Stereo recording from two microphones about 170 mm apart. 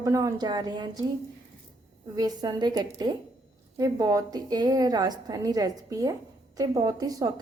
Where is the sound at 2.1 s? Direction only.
20° right (ahead or behind).